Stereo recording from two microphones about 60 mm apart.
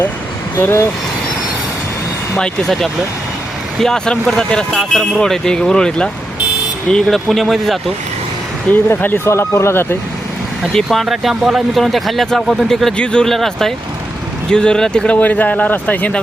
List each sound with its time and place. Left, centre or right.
0.6 s speech: left
2.3 s speech: centre
8.7 s speech: left
9.2 s speech: left
10.9 s speech: centre; by 16.2 s left